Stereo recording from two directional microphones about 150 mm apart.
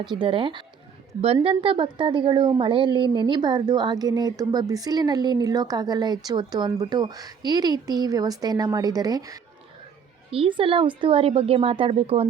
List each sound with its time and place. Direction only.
0.0 s a woman's voice: 30° right (ahead or behind)
10.3 s a woman's voice: 35° right (ahead or behind)